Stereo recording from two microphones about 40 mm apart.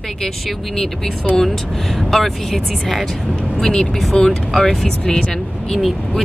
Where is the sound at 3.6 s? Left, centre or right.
Centre.